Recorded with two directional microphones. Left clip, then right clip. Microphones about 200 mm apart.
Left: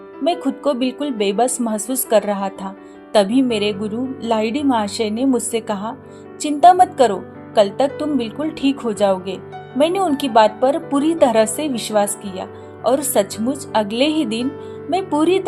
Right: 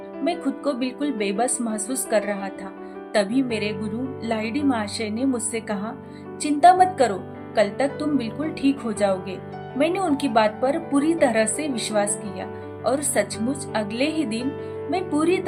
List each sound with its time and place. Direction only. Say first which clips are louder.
0.3 s a woman's voice: left 6 dB; 30° left (ahead or behind)